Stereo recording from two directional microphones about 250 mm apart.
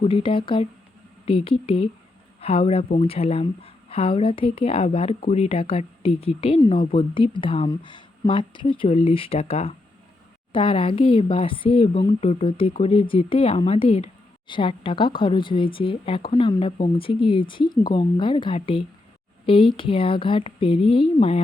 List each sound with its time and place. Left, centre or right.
0.0 s a woman's voice: left